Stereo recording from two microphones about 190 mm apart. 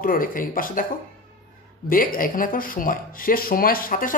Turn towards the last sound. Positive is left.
turn(degrees=45)  # may be behind; listen again after turning